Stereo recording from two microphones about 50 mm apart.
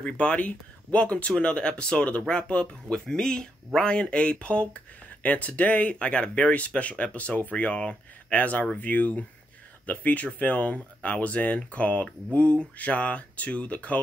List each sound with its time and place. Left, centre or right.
0.0 s speech: left
8.4 s speech: left